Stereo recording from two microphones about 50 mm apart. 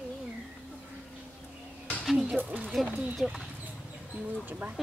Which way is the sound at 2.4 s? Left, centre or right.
Right.